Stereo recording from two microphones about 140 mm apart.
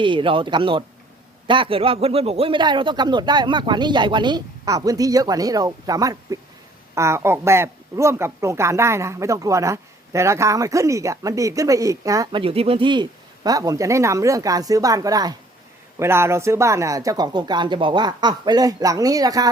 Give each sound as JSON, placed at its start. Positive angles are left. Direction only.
{"t": 0.0, "sound": "a man's voice", "side_deg": -35}
{"t": 12.4, "sound": "speech", "side_deg": -45}